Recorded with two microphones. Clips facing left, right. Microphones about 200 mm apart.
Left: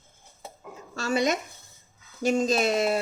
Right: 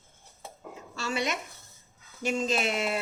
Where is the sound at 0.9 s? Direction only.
45° left (ahead or behind).